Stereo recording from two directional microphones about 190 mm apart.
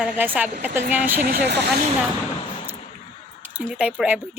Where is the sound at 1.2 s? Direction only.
55° right (ahead or behind).